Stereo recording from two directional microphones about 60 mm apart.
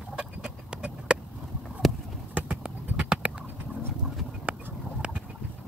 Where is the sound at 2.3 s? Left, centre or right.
Centre.